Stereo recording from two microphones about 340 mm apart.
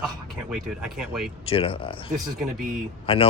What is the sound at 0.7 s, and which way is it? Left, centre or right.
Speech, centre.